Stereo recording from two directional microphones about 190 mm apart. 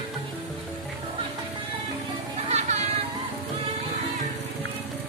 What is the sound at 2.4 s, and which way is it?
Music, 35° right (ahead or behind).